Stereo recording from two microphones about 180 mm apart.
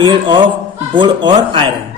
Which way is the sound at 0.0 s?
25° right (ahead or behind).